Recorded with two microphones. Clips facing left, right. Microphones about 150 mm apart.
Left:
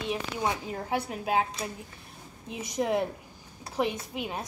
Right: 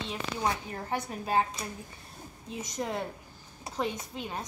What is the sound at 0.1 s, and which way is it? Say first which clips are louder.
A woman's voice: left 1 dB; 15° left (ahead or behind).